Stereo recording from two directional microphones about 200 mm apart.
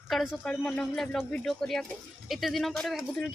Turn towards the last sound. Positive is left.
turn(degrees=0)  # may be behind; listen again after turning